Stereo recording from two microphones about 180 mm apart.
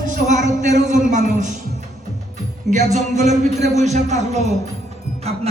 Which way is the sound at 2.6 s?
40° right (ahead or behind).